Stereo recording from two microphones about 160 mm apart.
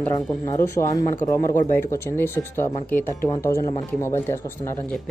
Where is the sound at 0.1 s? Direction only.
20° left (ahead or behind).